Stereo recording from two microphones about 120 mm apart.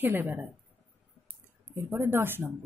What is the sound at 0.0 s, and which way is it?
Speech, 15° right (ahead or behind).